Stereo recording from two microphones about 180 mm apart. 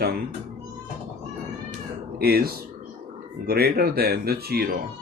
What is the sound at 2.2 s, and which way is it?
Speech, 60° right (ahead or behind).